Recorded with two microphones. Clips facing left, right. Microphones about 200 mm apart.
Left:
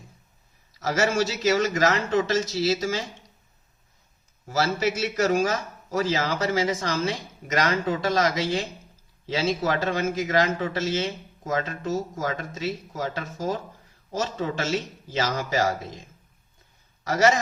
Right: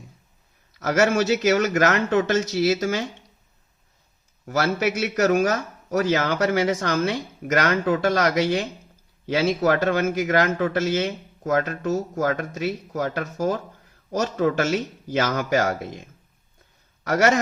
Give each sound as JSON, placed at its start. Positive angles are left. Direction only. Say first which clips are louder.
{"t": 0.8, "sound": "speech", "louder": "right 4 dB", "side_deg": -60}
{"t": 4.4, "sound": "speech", "louder": "right 2 dB", "side_deg": -60}
{"t": 17.0, "sound": "a man's voice", "louder": "right 1 dB", "side_deg": -60}